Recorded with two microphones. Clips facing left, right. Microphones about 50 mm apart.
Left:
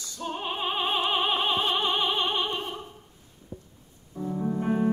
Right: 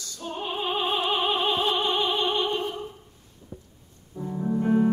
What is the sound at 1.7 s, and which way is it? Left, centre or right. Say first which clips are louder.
Opera: right 1 dB; centre.